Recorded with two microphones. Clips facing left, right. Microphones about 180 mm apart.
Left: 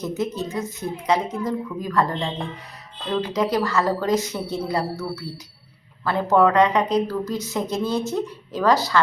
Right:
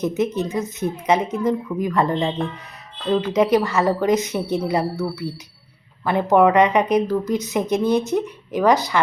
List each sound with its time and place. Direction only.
0.0 s a woman's voice: 20° right (ahead or behind)